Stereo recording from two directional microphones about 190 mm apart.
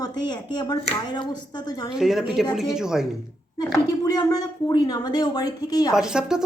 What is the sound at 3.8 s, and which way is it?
A woman's voice, 20° left (ahead or behind).